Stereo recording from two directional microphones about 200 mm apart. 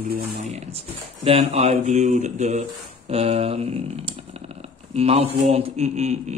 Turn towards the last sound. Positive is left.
turn(degrees=-35)  # may be behind; listen again after turning